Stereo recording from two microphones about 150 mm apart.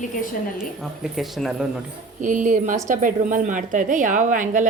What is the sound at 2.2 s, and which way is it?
A woman's voice, 60° right (ahead or behind).